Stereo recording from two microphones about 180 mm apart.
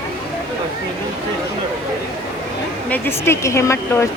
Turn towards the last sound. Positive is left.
turn(degrees=15)  # may be behind; listen again after turning